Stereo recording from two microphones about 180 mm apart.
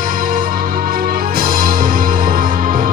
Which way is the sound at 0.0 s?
50° right (ahead or behind).